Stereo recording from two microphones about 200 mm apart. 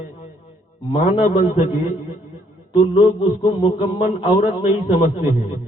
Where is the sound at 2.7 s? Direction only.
25° left (ahead or behind).